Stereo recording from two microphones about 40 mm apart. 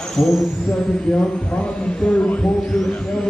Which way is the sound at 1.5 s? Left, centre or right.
Left.